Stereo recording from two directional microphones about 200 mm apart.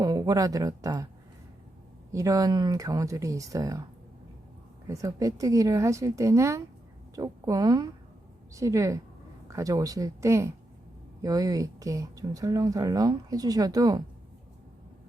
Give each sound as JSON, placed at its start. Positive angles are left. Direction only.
{"t": 0.0, "sound": "speech", "side_deg": -20}
{"t": 2.1, "sound": "speech", "side_deg": -15}
{"t": 4.9, "sound": "speech", "side_deg": -15}